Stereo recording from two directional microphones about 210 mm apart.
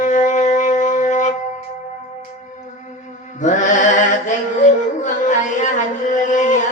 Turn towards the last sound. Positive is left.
turn(degrees=35)  # may be behind; listen again after turning